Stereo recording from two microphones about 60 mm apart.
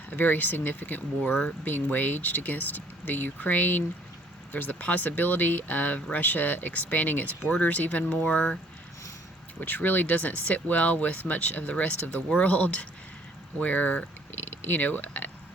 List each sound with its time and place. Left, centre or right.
0.1 s speech: left
9.6 s speech: left